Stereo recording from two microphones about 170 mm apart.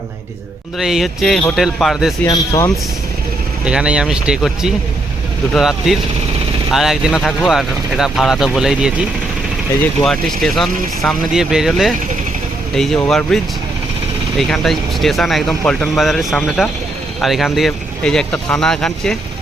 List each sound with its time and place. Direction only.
0.8 s speech: centre (ahead or behind)
2.2 s speech: 20° left (ahead or behind)
3.6 s speech: 5° right (ahead or behind)